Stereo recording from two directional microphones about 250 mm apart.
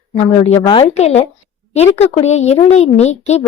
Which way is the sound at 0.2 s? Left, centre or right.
Left.